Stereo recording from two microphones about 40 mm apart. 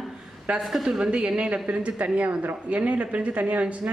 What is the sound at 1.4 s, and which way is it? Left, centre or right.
Speech, right.